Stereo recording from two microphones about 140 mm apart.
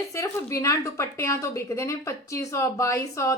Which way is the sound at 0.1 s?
20° left (ahead or behind).